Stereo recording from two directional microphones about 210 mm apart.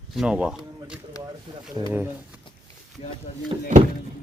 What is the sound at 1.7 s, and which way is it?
Speech, 20° right (ahead or behind).